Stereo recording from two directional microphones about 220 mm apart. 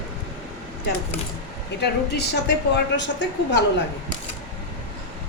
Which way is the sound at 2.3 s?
50° left (ahead or behind).